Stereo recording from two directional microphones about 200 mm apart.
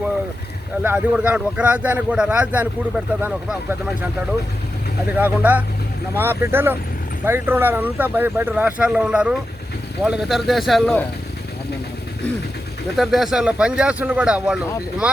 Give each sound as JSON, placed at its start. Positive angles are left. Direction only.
{"t": 0.8, "sound": "speech", "side_deg": -5}
{"t": 5.1, "sound": "a man's voice", "side_deg": -10}
{"t": 13.0, "sound": "a man's voice", "side_deg": 0}